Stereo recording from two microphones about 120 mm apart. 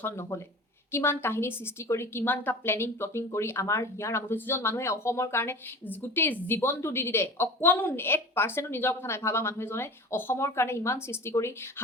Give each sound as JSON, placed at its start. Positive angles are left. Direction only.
{"t": 0.0, "sound": "a woman's voice", "side_deg": 20}